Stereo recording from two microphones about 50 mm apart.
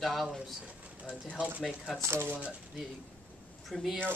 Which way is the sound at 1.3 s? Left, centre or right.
Right.